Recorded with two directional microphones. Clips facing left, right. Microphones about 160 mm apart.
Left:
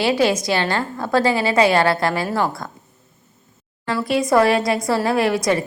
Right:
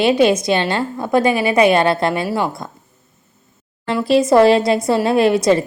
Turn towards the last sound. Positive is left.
turn(degrees=-25)  # may be behind; listen again after turning